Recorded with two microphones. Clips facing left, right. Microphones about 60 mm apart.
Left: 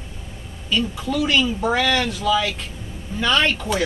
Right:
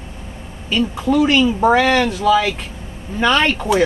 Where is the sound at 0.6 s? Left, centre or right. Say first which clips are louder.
Right 5 dB; right.